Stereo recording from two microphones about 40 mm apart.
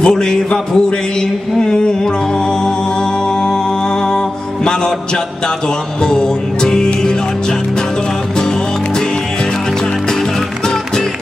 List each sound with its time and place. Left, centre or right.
0.0 s a sound: centre
1.6 s music: centre
6.0 s music: centre